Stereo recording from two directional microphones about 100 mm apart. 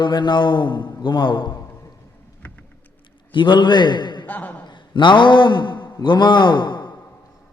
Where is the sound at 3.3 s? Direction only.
55° left (ahead or behind).